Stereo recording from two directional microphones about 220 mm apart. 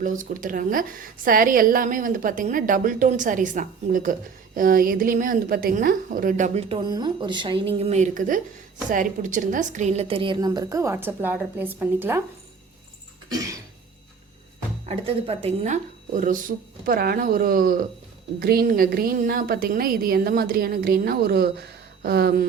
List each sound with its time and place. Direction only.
0.0 s a woman's voice: 35° right (ahead or behind); by 12.2 s 10° right (ahead or behind)
13.2 s cough: 15° right (ahead or behind)
14.8 s a woman's voice: 25° right (ahead or behind); by 22.4 s 45° right (ahead or behind)